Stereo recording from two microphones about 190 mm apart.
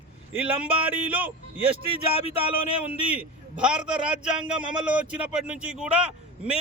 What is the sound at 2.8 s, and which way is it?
A man's voice, 5° right (ahead or behind).